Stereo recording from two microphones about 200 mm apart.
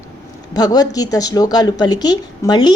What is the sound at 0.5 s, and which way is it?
A woman's voice, 20° left (ahead or behind).